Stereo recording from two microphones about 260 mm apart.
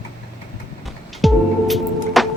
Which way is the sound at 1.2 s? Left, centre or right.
Centre.